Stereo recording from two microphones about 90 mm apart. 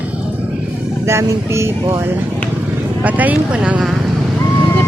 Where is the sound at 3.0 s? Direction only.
15° right (ahead or behind).